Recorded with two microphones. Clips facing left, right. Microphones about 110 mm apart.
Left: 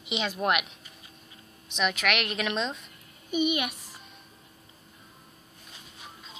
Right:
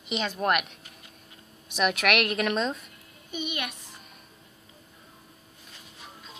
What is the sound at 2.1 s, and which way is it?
Speech, 55° right (ahead or behind).